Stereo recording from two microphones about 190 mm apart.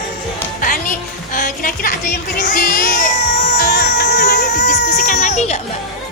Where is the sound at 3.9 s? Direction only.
60° left (ahead or behind).